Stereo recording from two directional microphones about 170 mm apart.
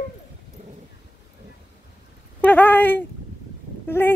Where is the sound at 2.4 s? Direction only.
10° left (ahead or behind).